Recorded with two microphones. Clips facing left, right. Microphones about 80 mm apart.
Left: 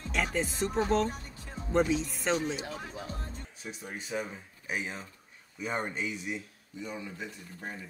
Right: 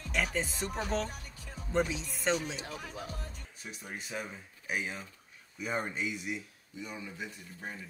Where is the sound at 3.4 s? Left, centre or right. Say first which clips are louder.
Left 3 dB; centre.